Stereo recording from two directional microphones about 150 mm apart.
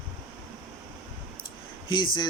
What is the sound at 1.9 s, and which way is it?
Speech, 30° left (ahead or behind).